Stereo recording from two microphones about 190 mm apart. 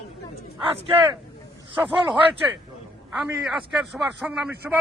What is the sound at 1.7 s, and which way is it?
Speech, 25° right (ahead or behind).